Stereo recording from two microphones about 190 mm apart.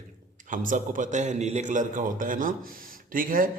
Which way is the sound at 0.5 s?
45° right (ahead or behind).